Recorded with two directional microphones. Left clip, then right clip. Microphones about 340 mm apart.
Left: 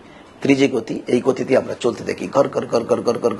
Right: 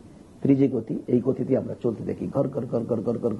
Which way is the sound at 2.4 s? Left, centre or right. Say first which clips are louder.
Left 10 dB; centre.